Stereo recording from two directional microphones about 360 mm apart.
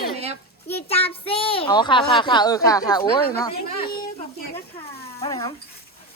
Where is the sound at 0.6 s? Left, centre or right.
Centre.